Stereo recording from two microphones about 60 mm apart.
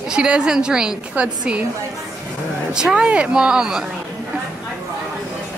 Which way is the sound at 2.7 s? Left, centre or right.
Centre.